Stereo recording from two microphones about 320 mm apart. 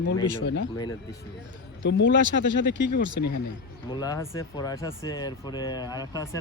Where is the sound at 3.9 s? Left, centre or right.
Centre.